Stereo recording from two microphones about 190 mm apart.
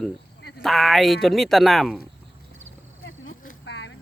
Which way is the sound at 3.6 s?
65° left (ahead or behind).